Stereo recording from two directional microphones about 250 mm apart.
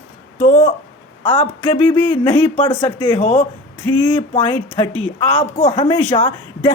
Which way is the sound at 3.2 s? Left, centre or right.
Left.